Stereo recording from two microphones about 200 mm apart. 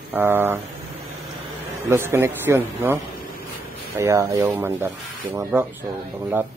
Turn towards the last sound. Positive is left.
turn(degrees=-10)  # may be behind; listen again after turning